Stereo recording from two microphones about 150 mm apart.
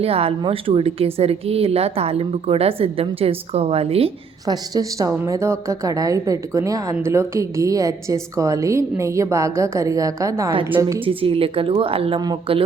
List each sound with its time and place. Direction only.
0.0 s a woman's voice: 40° right (ahead or behind)
4.4 s a woman's voice: 25° right (ahead or behind)
11.0 s a woman's voice: 35° right (ahead or behind)